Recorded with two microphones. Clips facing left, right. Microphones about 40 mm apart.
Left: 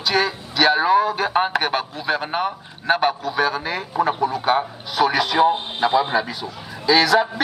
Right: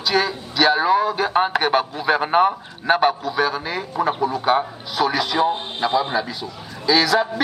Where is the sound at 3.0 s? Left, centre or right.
Centre.